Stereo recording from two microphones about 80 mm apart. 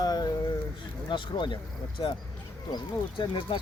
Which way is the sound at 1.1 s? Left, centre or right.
Left.